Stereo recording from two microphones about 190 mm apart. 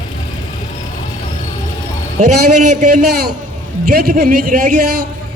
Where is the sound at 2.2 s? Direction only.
40° right (ahead or behind).